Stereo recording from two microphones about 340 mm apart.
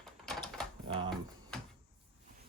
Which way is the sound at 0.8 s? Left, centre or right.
Centre.